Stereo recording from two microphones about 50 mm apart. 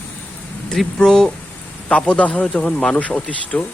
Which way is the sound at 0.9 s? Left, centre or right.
Centre.